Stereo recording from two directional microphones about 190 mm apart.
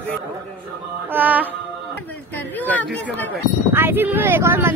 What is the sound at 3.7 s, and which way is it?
Speech, 10° right (ahead or behind).